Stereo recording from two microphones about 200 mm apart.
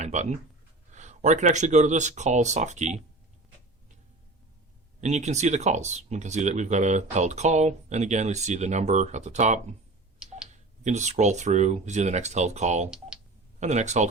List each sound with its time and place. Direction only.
0.0 s speech: 35° right (ahead or behind)
4.9 s speech: 35° right (ahead or behind)
10.8 s speech: 35° right (ahead or behind)